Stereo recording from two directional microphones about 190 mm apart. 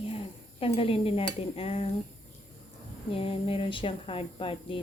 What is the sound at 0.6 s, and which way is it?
Speech, 30° left (ahead or behind).